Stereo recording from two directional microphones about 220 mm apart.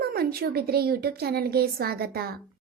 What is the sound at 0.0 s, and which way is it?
A woman's voice, 45° right (ahead or behind).